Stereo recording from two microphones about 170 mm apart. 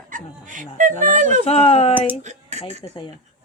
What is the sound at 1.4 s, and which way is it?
Speech, 35° left (ahead or behind).